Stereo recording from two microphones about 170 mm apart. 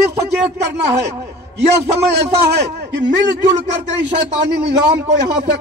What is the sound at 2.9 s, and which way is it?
Speech, 90° right.